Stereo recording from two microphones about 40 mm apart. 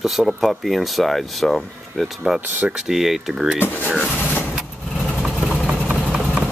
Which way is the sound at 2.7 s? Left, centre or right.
Centre.